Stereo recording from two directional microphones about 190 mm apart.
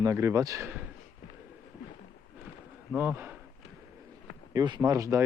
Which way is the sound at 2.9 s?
10° right (ahead or behind).